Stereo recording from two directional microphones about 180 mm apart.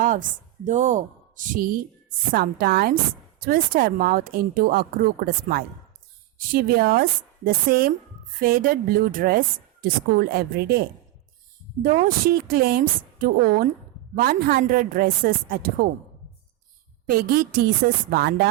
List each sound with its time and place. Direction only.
0.0 s a woman's voice: 45° right (ahead or behind); by 10.8 s 60° right (ahead or behind)
12.0 s a woman's voice: 55° right (ahead or behind)
17.1 s speech: 55° right (ahead or behind)